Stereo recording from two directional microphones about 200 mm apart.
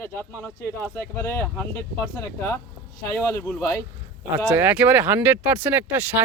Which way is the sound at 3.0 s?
15° left (ahead or behind).